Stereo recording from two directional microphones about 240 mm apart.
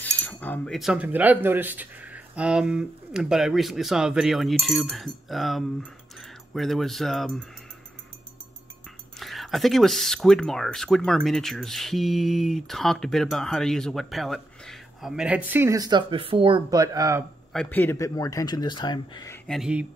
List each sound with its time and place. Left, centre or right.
0.0 s speech: centre
9.2 s speech: centre
17.5 s speech: centre